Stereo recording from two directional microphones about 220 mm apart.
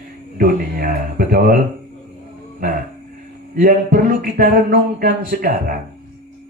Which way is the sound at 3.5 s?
40° right (ahead or behind).